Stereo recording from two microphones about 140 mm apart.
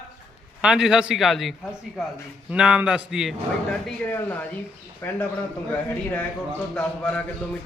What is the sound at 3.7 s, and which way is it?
A man's voice, 10° left (ahead or behind).